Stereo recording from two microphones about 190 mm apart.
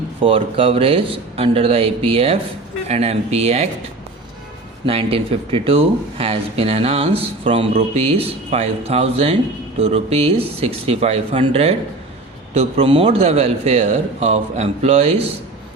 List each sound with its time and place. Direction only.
0.2 s speech: 30° right (ahead or behind)
4.9 s speech: 30° right (ahead or behind)